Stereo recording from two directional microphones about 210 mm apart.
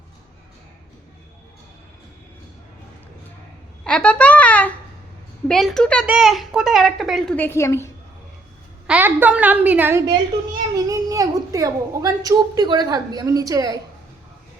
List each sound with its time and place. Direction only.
3.8 s a child's voice: 5° left (ahead or behind)
8.9 s a woman's voice: 10° right (ahead or behind)